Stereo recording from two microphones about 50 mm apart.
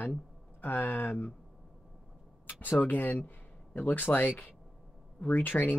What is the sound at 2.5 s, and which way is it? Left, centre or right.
Speech, left.